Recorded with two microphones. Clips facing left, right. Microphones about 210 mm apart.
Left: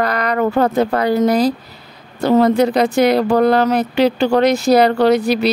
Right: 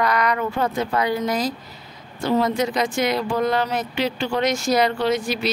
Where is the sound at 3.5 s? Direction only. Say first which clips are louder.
Left 8 dB; 40° left (ahead or behind).